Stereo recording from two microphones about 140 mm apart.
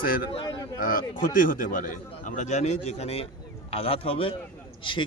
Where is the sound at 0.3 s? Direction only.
40° left (ahead or behind).